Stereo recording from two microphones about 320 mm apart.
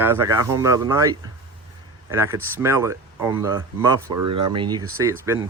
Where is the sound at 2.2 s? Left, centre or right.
Centre.